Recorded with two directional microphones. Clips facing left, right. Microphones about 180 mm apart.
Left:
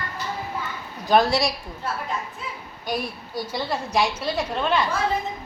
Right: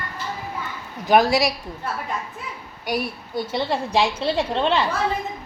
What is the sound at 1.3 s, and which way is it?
Speech, 20° right (ahead or behind).